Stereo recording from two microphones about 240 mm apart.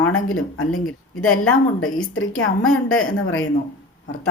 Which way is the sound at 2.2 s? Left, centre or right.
Left.